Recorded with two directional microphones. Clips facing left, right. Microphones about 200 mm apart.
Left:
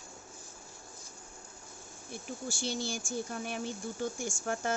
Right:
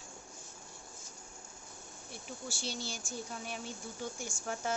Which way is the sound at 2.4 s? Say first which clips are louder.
Left 6 dB; 50° left (ahead or behind).